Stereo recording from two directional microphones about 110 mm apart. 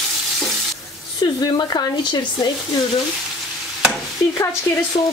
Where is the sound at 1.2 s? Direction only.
35° left (ahead or behind).